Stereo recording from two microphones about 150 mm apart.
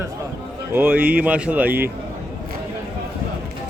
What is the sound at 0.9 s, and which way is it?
Speech, 75° right (ahead or behind).